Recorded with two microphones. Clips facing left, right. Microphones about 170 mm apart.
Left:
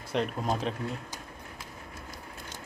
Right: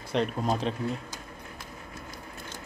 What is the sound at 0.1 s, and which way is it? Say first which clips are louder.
Speech: right 2 dB; centre (ahead or behind).